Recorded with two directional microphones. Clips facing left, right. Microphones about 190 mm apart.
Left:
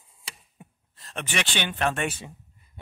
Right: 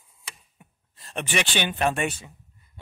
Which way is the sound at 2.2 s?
20° left (ahead or behind).